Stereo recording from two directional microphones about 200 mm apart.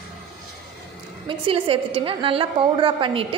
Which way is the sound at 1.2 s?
25° right (ahead or behind).